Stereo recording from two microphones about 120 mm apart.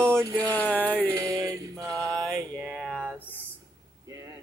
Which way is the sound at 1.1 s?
25° right (ahead or behind).